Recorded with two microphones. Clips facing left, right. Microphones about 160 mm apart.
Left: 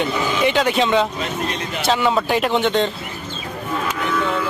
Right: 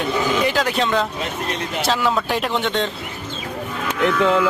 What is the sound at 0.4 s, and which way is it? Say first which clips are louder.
Speech: left 3 dB; centre (ahead or behind).